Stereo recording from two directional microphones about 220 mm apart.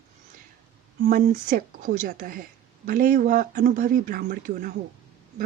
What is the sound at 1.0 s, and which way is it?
Speech, 40° right (ahead or behind).